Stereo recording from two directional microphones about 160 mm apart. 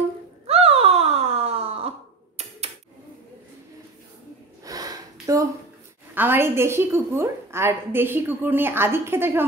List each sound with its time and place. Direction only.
0.5 s groan: 40° right (ahead or behind)
4.6 s sniff: 20° right (ahead or behind)
5.2 s a woman's voice: 20° right (ahead or behind)